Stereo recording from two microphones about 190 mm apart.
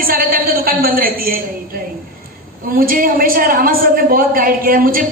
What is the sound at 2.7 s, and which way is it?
A man's voice, 50° right (ahead or behind).